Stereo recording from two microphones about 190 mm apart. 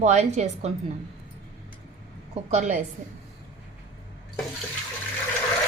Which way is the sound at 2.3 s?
35° right (ahead or behind).